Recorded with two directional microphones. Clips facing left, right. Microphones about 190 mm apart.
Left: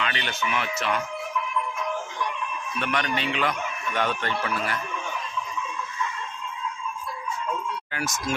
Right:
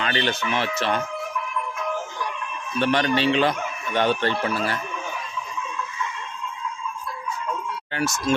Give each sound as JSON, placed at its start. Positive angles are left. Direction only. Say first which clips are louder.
{"t": 0.0, "sound": "speech", "louder": "right 5 dB", "side_deg": -35}
{"t": 2.7, "sound": "speech", "louder": "right 7 dB", "side_deg": -30}